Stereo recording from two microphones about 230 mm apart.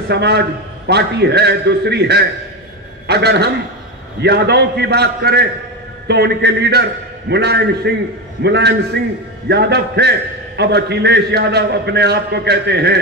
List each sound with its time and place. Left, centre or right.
0.1 s a man's voice: right